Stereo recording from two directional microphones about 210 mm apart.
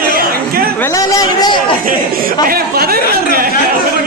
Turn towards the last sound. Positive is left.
turn(degrees=-45)  # may be behind; listen again after turning